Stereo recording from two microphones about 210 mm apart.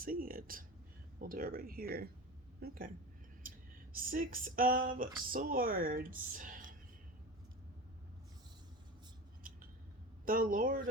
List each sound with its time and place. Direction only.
0.0 s speech: 45° right (ahead or behind)
3.9 s speech: 40° right (ahead or behind)
10.2 s speech: 40° right (ahead or behind)